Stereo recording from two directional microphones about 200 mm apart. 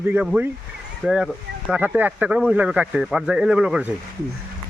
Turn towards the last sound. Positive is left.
turn(degrees=-5)  # may be behind; listen again after turning